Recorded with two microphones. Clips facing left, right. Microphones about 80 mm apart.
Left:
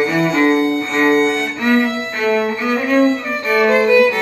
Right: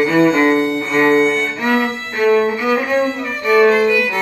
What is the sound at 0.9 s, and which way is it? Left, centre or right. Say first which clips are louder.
Music: right 2 dB; centre.